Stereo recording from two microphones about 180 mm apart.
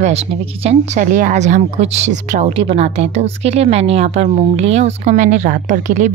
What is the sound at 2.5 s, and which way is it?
A woman's voice, 35° right (ahead or behind).